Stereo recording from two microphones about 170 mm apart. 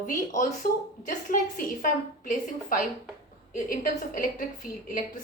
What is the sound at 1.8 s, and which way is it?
A woman's voice, 55° left (ahead or behind).